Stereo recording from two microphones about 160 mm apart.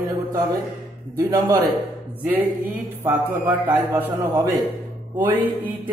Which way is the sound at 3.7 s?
10° right (ahead or behind).